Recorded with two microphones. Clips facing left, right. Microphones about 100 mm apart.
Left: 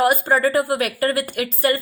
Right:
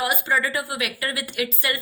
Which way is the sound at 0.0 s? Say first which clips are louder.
Left 7 dB; 45° left (ahead or behind).